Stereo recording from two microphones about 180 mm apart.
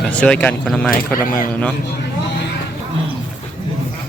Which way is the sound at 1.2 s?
50° left (ahead or behind).